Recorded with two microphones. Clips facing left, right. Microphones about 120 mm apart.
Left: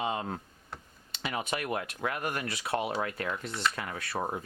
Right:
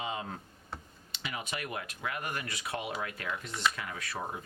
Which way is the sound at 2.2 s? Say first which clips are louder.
Left 4 dB; 60° left (ahead or behind).